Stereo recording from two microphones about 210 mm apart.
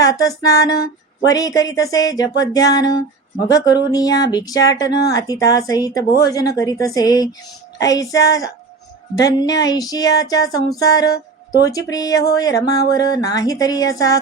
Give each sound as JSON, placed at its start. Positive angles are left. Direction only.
{"t": 0.0, "sound": "music", "side_deg": 15}